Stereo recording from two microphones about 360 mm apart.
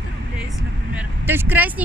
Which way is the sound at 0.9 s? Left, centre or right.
Centre.